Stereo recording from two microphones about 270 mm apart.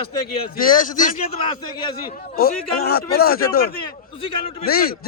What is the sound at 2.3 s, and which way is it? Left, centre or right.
A man's voice, left.